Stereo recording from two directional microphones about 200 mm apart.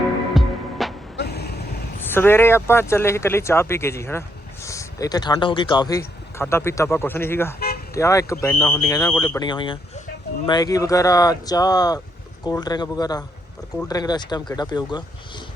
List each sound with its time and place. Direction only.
0.3 s music: centre (ahead or behind)
1.1 s vehicle: 55° left (ahead or behind)
2.0 s speech: 10° left (ahead or behind)